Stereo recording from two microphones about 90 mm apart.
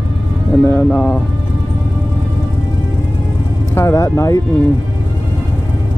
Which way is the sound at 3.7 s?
35° left (ahead or behind).